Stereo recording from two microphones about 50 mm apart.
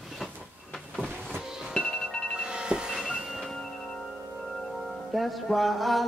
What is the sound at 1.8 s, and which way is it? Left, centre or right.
Music, centre.